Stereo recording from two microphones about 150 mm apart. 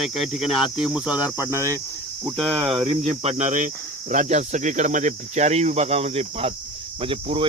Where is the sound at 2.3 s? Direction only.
40° right (ahead or behind).